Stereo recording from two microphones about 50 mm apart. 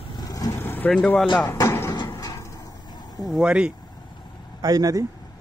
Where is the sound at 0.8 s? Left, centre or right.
Left.